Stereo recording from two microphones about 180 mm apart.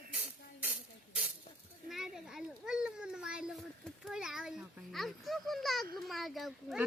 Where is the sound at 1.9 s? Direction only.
Centre (ahead or behind).